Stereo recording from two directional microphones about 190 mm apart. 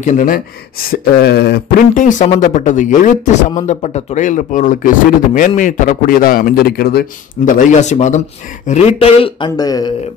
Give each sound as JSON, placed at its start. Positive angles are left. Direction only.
{"t": 0.0, "sound": "a man's voice", "side_deg": 40}